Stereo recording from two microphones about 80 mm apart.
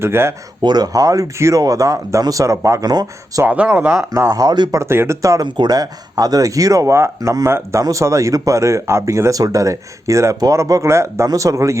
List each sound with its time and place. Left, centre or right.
0.0 s speech: right
0.6 s speech: right
2.8 s speech: right
3.4 s speech: centre
4.3 s speech: right
4.7 s speech: right
5.5 s speech: right
7.2 s speech: right
7.4 s speech: right